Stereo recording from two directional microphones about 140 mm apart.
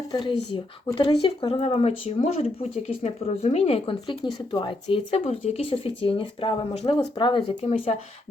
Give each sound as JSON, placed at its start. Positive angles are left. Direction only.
{"t": 0.1, "sound": "a woman's voice", "side_deg": 35}